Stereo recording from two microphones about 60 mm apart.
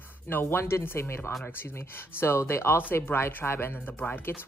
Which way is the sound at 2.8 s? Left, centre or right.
Left.